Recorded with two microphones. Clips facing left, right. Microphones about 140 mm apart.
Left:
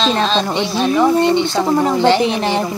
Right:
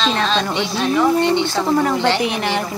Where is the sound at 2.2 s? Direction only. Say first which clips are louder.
Left 4 dB; 30° left (ahead or behind).